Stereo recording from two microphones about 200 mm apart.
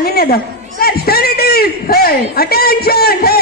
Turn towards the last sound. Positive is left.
turn(degrees=50)  # may be behind; listen again after turning